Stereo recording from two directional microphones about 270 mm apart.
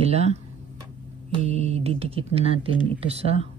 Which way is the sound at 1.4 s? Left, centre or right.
Right.